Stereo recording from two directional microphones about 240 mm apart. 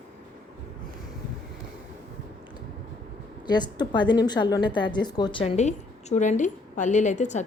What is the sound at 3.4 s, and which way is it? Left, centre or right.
A woman's voice, centre.